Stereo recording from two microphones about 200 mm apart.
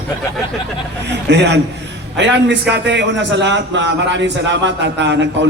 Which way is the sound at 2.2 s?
60° right (ahead or behind).